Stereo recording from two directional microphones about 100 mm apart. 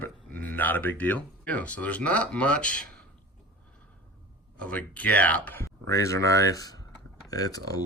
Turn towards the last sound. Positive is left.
turn(degrees=40)  # may be behind; listen again after turning